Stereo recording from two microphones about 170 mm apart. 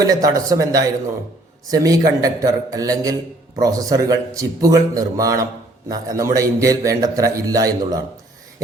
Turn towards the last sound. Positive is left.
turn(degrees=-20)  # may be behind; listen again after turning